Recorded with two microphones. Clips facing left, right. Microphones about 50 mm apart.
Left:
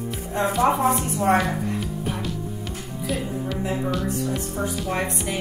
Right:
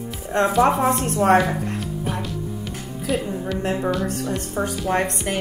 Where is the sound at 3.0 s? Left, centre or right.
Centre.